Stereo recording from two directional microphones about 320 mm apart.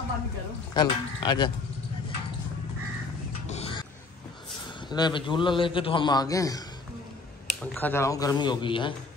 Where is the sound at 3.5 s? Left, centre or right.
Centre.